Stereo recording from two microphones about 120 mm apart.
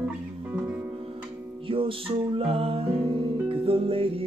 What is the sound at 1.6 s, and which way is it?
Music, 45° right (ahead or behind).